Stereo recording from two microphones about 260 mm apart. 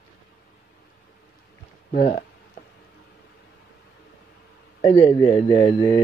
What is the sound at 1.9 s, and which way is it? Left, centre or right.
Speech, left.